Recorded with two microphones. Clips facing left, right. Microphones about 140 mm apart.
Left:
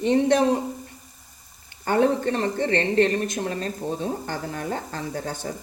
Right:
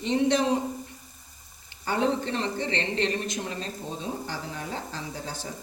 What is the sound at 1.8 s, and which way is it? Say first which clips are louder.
A woman's voice: left 6 dB; 55° left (ahead or behind).